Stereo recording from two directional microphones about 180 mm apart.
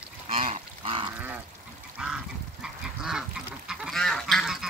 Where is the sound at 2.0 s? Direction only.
5° right (ahead or behind).